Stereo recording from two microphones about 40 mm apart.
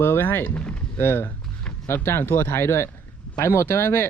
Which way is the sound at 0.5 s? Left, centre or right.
Left.